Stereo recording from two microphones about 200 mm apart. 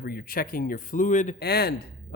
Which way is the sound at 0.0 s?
50° left (ahead or behind).